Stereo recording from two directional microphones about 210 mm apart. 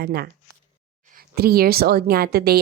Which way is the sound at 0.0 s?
50° right (ahead or behind).